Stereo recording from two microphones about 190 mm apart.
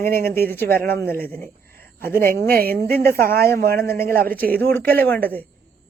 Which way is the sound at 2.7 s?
55° right (ahead or behind).